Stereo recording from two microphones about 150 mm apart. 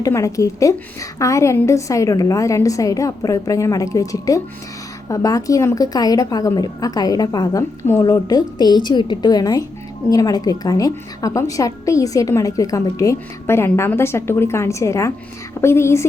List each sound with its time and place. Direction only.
0.0 s a woman's voice: 20° left (ahead or behind)